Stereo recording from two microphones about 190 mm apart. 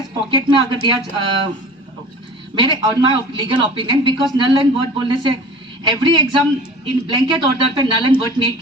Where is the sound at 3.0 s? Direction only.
25° right (ahead or behind).